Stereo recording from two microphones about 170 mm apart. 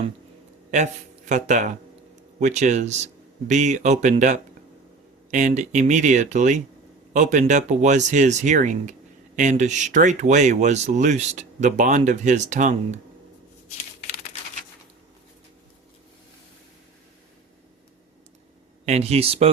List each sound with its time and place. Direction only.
1.3 s speech: 45° right (ahead or behind)
18.9 s a man's voice: 40° right (ahead or behind)